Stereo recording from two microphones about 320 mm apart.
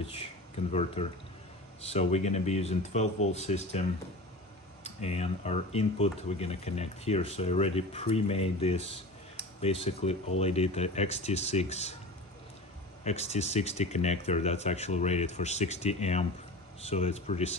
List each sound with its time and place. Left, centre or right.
0.0 s speech: centre
4.8 s speech: centre
9.8 s speech: centre
13.0 s speech: centre